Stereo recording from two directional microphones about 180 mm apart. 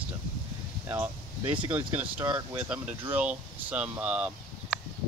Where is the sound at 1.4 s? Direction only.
30° right (ahead or behind).